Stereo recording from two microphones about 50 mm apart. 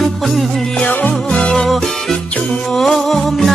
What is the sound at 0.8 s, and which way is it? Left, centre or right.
Music, left.